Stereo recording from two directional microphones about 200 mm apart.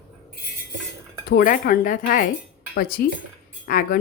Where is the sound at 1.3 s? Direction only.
45° left (ahead or behind).